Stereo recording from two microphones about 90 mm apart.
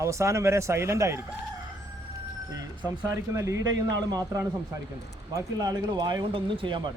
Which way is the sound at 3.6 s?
45° right (ahead or behind).